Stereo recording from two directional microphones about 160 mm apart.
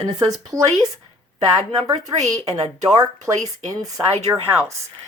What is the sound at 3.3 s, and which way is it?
Speech, 20° right (ahead or behind).